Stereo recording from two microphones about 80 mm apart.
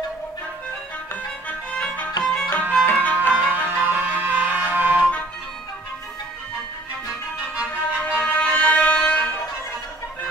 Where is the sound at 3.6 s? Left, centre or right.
Centre.